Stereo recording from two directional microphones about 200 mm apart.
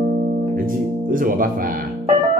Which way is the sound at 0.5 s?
45° right (ahead or behind).